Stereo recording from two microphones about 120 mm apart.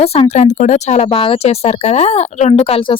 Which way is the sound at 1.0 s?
50° left (ahead or behind).